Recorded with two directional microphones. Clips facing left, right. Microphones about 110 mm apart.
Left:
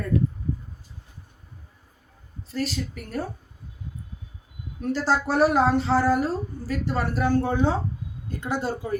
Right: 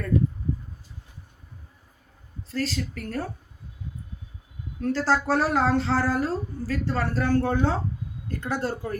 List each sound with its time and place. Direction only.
2.5 s speech: 15° left (ahead or behind)
4.8 s speech: 20° left (ahead or behind)